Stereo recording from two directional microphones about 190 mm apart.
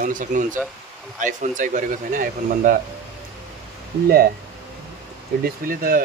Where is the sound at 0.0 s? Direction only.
40° right (ahead or behind).